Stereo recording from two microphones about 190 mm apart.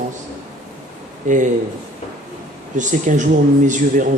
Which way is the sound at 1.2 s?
40° right (ahead or behind).